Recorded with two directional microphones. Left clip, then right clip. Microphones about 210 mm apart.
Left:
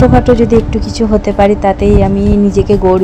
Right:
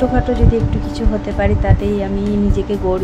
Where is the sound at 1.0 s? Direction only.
30° left (ahead or behind).